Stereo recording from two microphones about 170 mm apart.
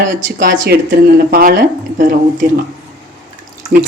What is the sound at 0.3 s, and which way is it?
Speech, 55° right (ahead or behind).